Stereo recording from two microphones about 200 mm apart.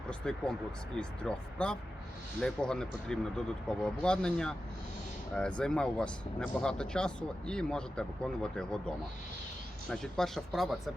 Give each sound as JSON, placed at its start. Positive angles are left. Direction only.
{"t": 0.1, "sound": "speech", "side_deg": 5}
{"t": 9.9, "sound": "speech", "side_deg": 0}